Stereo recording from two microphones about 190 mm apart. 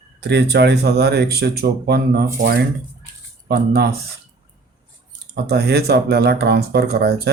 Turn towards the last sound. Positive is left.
turn(degrees=-55)  # may be behind; listen again after turning